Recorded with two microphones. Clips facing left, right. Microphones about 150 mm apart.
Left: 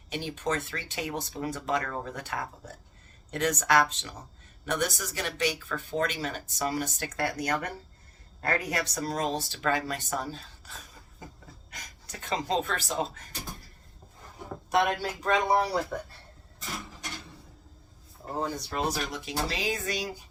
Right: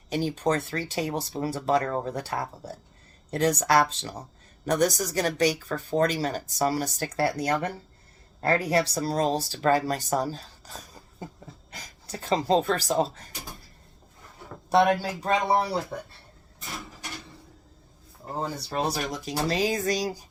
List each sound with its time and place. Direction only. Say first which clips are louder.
0.1 s speech: right 6 dB; 35° right (ahead or behind)
14.7 s speech: right 5 dB; 30° right (ahead or behind)
18.4 s speech: right 3 dB; 30° right (ahead or behind)